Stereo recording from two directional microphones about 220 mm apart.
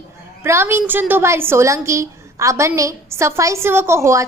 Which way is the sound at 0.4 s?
10° right (ahead or behind).